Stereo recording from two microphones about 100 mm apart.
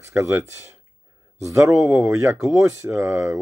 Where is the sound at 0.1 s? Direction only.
30° right (ahead or behind).